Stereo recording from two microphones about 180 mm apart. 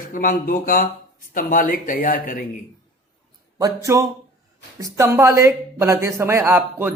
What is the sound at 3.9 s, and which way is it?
Speech, 15° right (ahead or behind).